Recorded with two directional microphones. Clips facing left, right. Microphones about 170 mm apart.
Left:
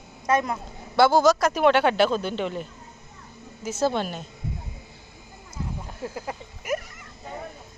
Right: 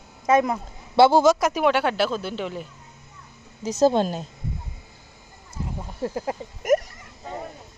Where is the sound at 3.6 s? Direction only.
40° right (ahead or behind).